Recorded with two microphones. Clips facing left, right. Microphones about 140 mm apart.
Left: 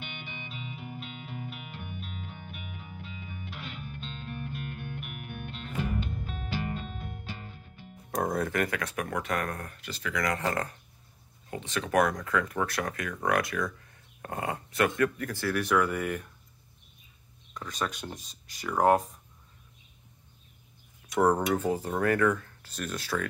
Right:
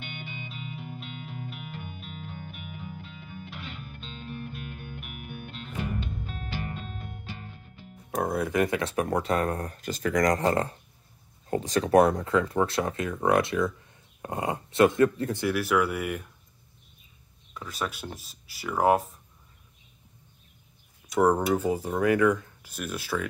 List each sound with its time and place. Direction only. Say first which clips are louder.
0.0 s music: right 2 dB; centre (ahead or behind)
8.1 s speech: right 1 dB; 5° right (ahead or behind)
8.5 s speech: right 5 dB; 25° right (ahead or behind)
15.5 s speech: left 1 dB; 5° right (ahead or behind)
17.6 s speech: even; 5° right (ahead or behind)
21.2 s speech: right 2 dB; 10° right (ahead or behind)